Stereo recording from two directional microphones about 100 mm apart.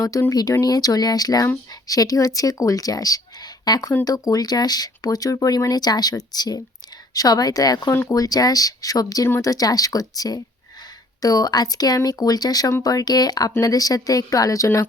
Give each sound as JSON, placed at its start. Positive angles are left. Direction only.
{"t": 0.0, "sound": "speech", "side_deg": 35}